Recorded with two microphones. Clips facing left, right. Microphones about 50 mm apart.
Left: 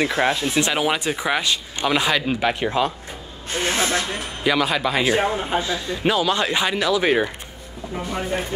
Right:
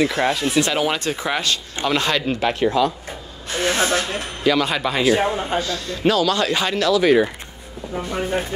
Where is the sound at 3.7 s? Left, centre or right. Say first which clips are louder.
Right 3 dB; right.